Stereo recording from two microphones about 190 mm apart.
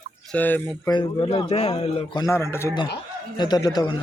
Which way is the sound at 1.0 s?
30° left (ahead or behind).